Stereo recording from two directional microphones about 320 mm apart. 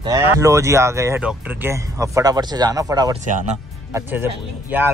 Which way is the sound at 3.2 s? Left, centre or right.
Right.